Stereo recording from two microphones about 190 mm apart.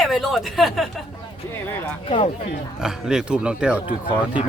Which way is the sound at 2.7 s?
5° right (ahead or behind).